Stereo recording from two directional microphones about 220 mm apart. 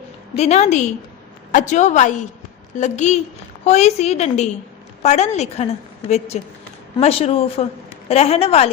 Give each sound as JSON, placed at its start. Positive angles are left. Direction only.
{"t": 0.3, "sound": "a woman's voice", "side_deg": 30}